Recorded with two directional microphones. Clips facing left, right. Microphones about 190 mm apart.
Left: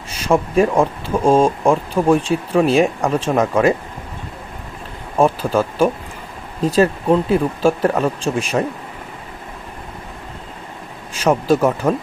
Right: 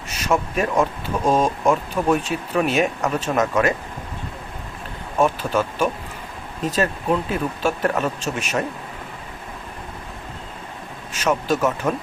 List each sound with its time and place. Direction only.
0.1 s speech: 30° left (ahead or behind)
5.1 s speech: 30° left (ahead or behind)
11.1 s speech: 35° left (ahead or behind)